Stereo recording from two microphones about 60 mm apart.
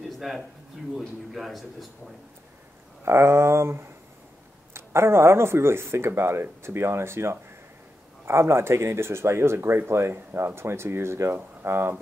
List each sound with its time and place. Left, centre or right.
0.2 s speech: centre
3.1 s speech: right